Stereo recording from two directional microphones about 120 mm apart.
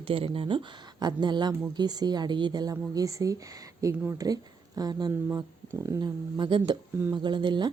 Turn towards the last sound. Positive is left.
turn(degrees=-40)  # may be behind; listen again after turning